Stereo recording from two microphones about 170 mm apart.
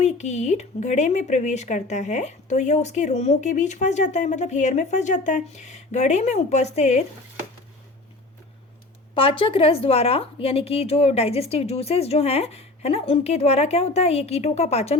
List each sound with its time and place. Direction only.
0.0 s speech: 40° left (ahead or behind)
9.1 s a woman's voice: 30° left (ahead or behind)